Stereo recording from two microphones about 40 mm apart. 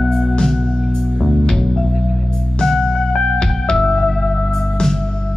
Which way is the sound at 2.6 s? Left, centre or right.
Centre.